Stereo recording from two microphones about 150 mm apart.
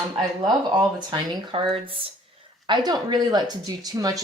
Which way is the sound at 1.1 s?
35° right (ahead or behind).